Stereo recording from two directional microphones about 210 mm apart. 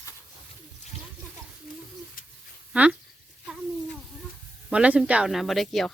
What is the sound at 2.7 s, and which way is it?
Speech, 5° right (ahead or behind).